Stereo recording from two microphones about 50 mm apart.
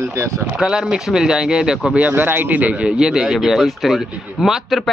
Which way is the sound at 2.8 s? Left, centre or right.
Centre.